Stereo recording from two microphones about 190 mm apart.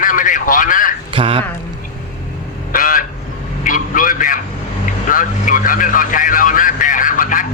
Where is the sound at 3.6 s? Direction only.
45° left (ahead or behind).